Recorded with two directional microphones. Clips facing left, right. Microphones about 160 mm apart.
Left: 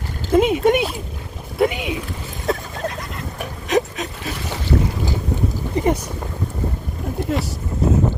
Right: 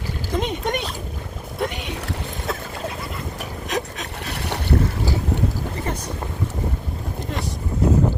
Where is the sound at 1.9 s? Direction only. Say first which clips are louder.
Left 3 dB; 70° right (ahead or behind).